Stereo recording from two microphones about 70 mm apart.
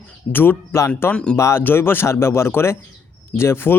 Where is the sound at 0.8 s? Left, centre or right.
Left.